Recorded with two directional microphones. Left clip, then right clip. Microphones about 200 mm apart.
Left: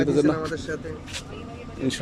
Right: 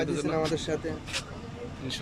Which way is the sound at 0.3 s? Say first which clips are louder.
Right 1 dB; 10° right (ahead or behind).